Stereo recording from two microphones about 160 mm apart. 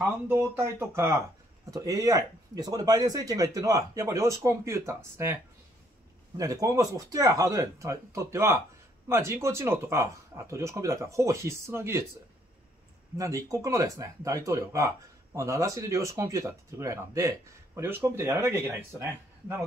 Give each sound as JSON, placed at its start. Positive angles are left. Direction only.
{"t": 0.3, "sound": "speech", "side_deg": -15}
{"t": 13.2, "sound": "speech", "side_deg": -20}